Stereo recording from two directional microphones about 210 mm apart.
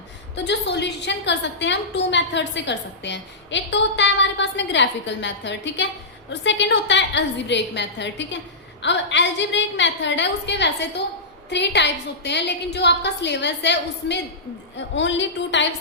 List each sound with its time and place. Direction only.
0.3 s a woman's voice: 55° left (ahead or behind)